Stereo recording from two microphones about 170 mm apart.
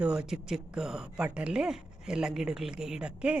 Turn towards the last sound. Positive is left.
turn(degrees=-5)  # may be behind; listen again after turning